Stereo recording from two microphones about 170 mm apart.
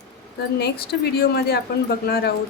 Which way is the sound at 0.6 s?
70° left (ahead or behind).